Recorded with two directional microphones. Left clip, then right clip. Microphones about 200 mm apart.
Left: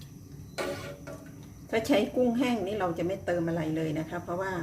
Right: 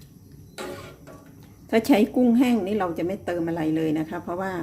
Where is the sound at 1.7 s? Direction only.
40° right (ahead or behind).